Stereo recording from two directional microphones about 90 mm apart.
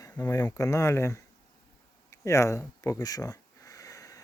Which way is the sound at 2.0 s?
35° left (ahead or behind).